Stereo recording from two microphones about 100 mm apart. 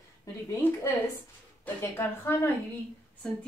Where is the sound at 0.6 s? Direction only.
20° left (ahead or behind).